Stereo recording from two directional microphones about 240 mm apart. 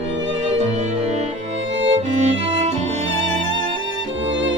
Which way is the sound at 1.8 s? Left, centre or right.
Right.